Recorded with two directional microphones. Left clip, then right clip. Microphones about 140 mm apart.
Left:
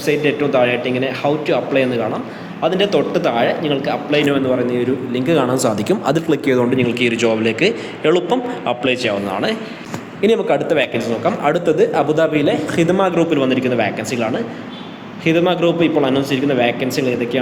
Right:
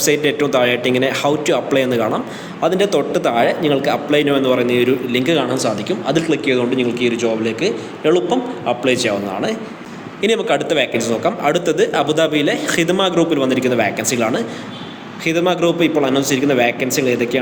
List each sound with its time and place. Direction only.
0.0 s a man's voice: 15° right (ahead or behind)
5.2 s speech: centre (ahead or behind)
5.7 s a man's voice: 40° left (ahead or behind)
6.2 s speech: 20° left (ahead or behind)
6.7 s a man's voice: 5° left (ahead or behind)
8.8 s a man's voice: 5° right (ahead or behind)
10.8 s a man's voice: 10° right (ahead or behind)